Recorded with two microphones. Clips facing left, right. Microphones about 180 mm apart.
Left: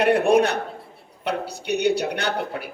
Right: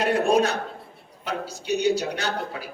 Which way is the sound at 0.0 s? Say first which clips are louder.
Left 3 dB; 60° left (ahead or behind).